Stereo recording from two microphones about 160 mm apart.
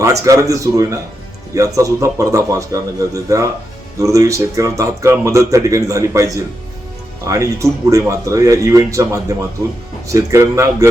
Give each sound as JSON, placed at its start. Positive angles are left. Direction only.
{"t": 0.0, "sound": "speech", "side_deg": -20}